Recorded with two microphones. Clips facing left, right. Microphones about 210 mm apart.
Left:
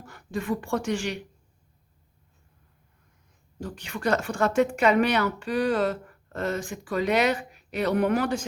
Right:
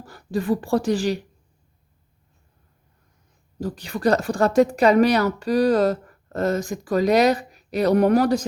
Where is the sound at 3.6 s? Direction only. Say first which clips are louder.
Right 7 dB; 35° right (ahead or behind).